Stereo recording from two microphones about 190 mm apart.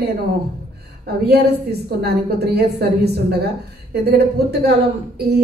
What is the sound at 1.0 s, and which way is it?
A woman's voice, 55° right (ahead or behind).